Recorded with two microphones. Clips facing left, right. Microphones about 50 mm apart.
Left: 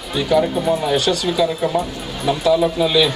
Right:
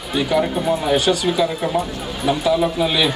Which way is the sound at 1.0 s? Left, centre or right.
Centre.